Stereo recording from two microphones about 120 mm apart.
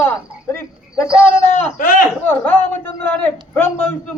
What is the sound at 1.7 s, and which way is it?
Speech, 90° left.